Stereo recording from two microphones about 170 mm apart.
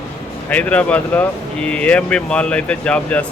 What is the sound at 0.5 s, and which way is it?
Speech, 10° left (ahead or behind).